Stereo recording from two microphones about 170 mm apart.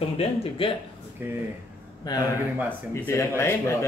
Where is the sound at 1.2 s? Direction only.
10° right (ahead or behind).